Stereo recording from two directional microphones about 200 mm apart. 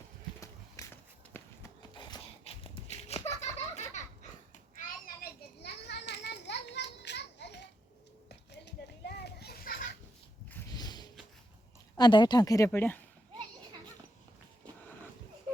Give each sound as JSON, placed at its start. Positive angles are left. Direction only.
{"t": 0.3, "sound": "run", "side_deg": 15}
{"t": 1.3, "sound": "horse", "side_deg": 20}
{"t": 5.0, "sound": "children playing", "side_deg": 50}
{"t": 10.8, "sound": "a sound", "side_deg": 20}
{"t": 11.9, "sound": "speech", "side_deg": 20}